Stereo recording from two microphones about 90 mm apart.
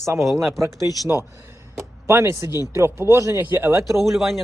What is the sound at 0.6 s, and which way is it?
Speech, 35° right (ahead or behind).